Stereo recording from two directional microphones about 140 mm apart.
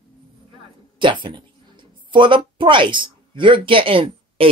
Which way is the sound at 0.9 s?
35° right (ahead or behind).